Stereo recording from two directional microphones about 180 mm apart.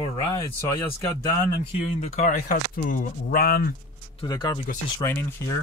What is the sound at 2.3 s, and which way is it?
Speech, 50° left (ahead or behind).